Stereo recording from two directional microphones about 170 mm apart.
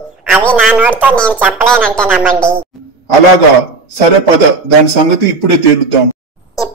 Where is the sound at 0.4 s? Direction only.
5° left (ahead or behind).